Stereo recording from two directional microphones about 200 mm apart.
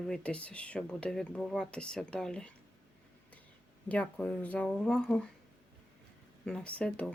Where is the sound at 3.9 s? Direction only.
5° left (ahead or behind).